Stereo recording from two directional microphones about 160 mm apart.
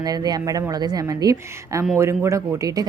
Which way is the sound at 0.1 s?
25° right (ahead or behind).